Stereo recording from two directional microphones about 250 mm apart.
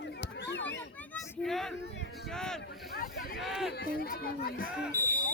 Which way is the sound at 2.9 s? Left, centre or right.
Left.